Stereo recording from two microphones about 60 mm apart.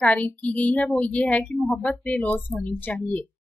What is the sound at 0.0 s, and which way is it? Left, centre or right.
A woman's voice, left.